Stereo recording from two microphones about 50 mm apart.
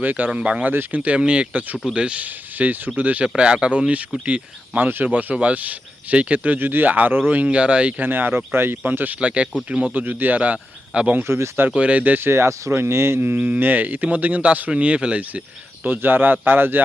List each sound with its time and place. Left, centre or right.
0.0 s speech: right
0.7 s speech: right
1.0 s speech: right
6.6 s speech: right
7.4 s speech: right
8.0 s speech: right
8.8 s speech: right
9.2 s speech: right
10.0 s speech: right
11.2 s speech: right
11.7 s speech: right
12.2 s speech: right
15.8 s speech: right